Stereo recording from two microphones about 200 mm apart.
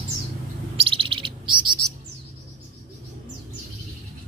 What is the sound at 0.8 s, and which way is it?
Bird, 25° right (ahead or behind).